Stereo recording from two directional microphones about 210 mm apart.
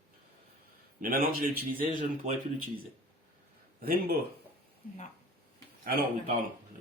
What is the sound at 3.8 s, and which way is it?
Speech, 45° right (ahead or behind).